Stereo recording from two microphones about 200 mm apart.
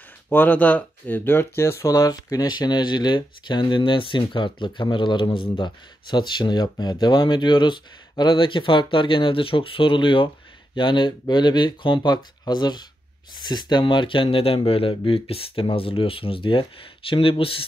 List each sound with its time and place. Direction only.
0.3 s speech: 10° left (ahead or behind); by 17.6 s 25° left (ahead or behind)